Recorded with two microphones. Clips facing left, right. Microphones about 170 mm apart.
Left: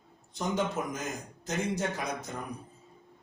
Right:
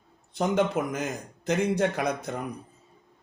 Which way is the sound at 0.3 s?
65° right (ahead or behind).